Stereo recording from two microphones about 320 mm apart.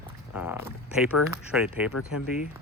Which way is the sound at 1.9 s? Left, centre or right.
Left.